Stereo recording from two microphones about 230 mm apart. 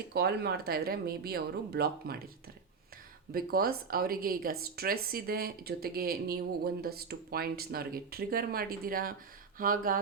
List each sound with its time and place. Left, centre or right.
0.1 s speech: right
3.3 s speech: right